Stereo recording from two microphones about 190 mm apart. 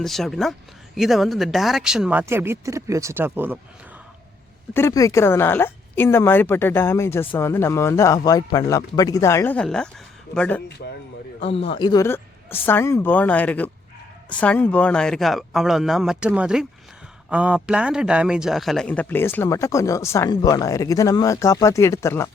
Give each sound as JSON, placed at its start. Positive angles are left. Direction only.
{"t": 0.0, "sound": "speech", "side_deg": 0}
{"t": 4.7, "sound": "a man's voice", "side_deg": 15}
{"t": 11.3, "sound": "a man's voice", "side_deg": 30}